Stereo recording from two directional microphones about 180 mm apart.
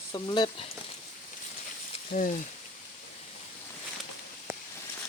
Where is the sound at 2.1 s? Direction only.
50° left (ahead or behind).